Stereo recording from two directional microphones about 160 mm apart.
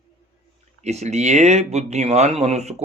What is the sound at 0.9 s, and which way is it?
Speech, 45° right (ahead or behind).